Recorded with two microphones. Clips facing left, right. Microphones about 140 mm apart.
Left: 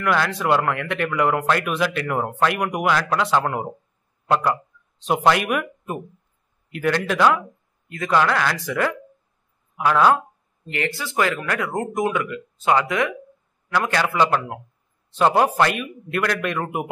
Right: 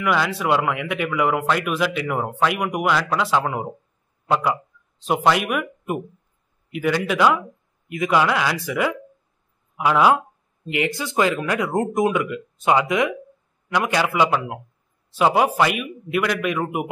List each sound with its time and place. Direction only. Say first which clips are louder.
0.0 s speech: even; 5° right (ahead or behind)
6.7 s speech: even; 5° right (ahead or behind)